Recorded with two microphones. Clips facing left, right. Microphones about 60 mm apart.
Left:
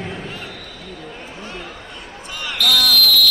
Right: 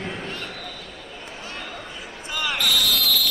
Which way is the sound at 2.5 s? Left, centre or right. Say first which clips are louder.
Left 5 dB; centre.